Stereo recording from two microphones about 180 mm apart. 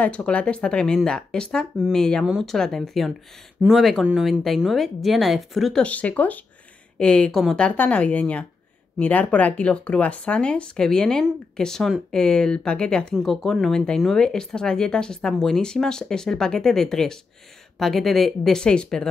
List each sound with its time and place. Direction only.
0.0 s a woman's voice: 5° left (ahead or behind)